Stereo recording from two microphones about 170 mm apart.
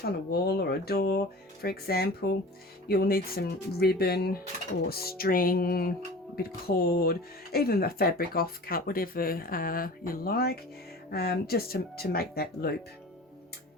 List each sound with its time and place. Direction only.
0.0 s speech: 65° left (ahead or behind)